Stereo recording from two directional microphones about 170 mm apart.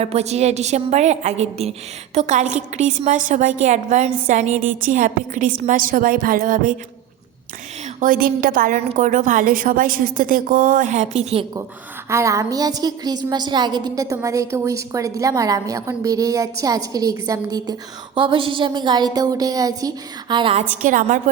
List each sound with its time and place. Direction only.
0.0 s a woman's voice: 40° right (ahead or behind)
7.9 s a woman's voice: 55° right (ahead or behind)
12.0 s a woman's voice: 15° right (ahead or behind)
20.3 s a woman's voice: 30° right (ahead or behind)
20.8 s a woman's voice: 50° right (ahead or behind)